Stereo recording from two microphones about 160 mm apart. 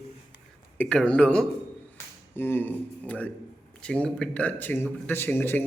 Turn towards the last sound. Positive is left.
turn(degrees=15)  # may be behind; listen again after turning